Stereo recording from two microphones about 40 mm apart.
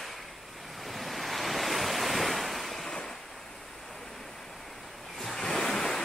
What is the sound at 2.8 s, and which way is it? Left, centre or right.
Waves, left.